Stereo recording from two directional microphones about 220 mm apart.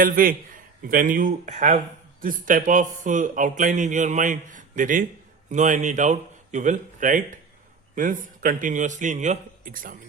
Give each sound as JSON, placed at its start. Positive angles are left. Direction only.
{"t": 0.0, "sound": "a man's voice", "side_deg": -40}